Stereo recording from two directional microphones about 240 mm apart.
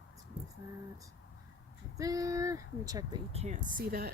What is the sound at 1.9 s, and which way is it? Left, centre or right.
Speech, centre.